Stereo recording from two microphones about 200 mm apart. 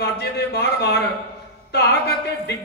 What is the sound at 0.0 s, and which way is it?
A man's voice, 55° left (ahead or behind).